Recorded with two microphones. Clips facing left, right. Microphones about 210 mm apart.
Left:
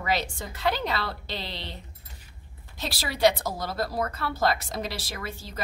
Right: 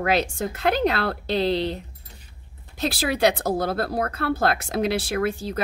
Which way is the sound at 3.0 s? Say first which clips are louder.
Right 2 dB; 55° right (ahead or behind).